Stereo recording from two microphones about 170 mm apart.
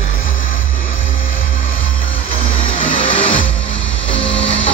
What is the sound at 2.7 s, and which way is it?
Music, 30° left (ahead or behind).